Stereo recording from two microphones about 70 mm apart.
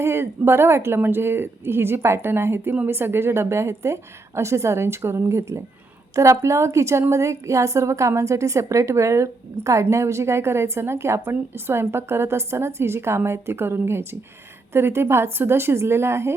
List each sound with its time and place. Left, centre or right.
0.0 s a woman's voice: right